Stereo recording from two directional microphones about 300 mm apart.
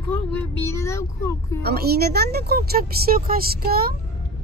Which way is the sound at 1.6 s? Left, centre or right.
Right.